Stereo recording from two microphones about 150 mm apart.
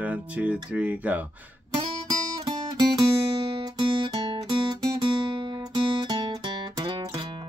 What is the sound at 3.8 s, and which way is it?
Guitar, 35° right (ahead or behind).